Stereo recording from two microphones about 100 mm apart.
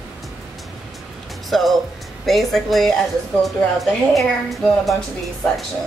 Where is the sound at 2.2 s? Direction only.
Centre (ahead or behind).